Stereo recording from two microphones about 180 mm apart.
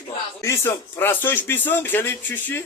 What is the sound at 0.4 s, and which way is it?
Speech, 15° left (ahead or behind).